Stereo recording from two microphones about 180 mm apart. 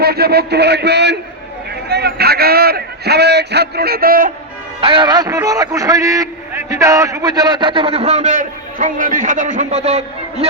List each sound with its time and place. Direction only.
0.0 s a man's voice: 60° right (ahead or behind)
4.8 s a man's voice: 30° right (ahead or behind)